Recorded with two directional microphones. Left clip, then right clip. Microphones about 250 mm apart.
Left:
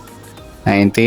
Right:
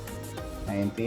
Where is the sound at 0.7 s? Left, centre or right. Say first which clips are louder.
Left 18 dB; left.